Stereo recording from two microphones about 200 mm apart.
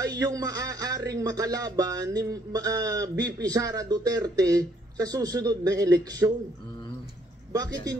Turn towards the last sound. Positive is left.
turn(degrees=-20)  # may be behind; listen again after turning